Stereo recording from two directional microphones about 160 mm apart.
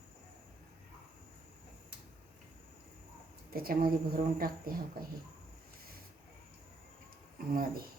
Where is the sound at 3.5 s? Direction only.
65° right (ahead or behind).